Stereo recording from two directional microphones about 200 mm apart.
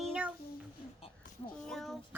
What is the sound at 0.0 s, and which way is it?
Child singing, 5° right (ahead or behind).